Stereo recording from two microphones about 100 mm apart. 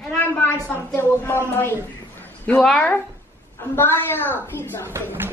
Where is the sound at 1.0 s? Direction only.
25° left (ahead or behind).